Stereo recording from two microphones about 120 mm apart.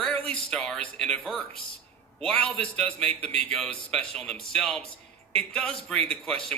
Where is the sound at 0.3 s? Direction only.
10° left (ahead or behind).